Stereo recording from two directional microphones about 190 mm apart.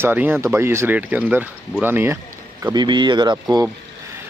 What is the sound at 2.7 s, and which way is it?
Speech, 25° right (ahead or behind).